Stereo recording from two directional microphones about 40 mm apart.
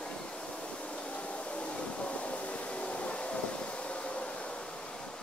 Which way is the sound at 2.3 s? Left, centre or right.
Left.